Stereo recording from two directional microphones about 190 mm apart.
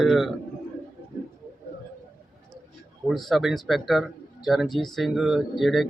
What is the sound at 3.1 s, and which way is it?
Speech, centre (ahead or behind).